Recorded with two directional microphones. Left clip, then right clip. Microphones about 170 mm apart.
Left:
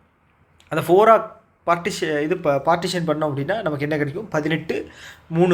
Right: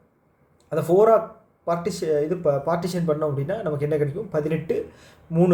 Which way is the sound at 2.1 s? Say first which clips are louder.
Left 1 dB; 30° left (ahead or behind).